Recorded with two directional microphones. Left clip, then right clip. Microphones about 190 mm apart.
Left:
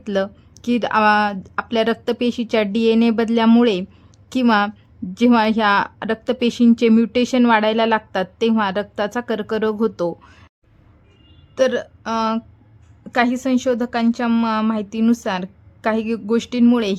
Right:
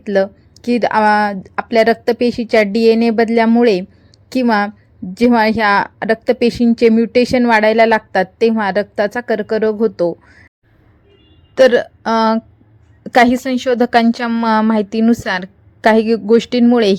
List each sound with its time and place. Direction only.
0.0 s a woman's voice: 15° right (ahead or behind)
11.5 s a woman's voice: 25° right (ahead or behind)